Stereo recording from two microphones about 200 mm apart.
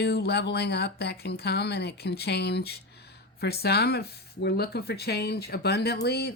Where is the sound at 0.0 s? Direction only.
55° left (ahead or behind).